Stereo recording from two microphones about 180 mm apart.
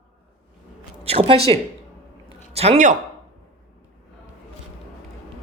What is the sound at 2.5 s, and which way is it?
Speech, 40° right (ahead or behind).